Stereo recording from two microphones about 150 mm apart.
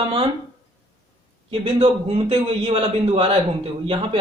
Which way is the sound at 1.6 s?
40° right (ahead or behind).